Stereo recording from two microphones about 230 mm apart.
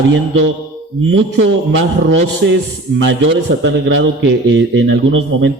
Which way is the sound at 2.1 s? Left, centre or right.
Right.